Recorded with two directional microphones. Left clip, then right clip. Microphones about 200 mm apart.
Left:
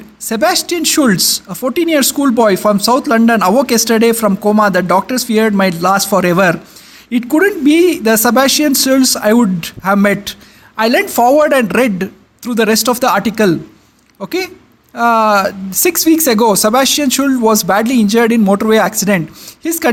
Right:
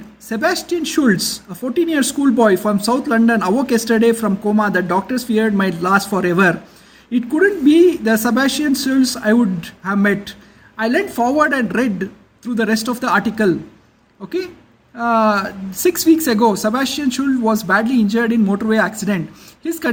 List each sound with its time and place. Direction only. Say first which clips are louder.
0.3 s speech: left 5 dB; 40° left (ahead or behind)